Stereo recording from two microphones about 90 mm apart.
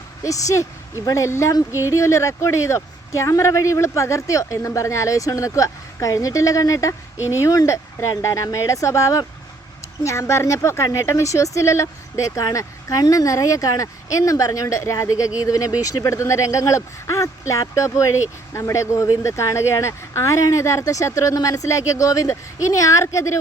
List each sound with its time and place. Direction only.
0.2 s speech: 35° left (ahead or behind)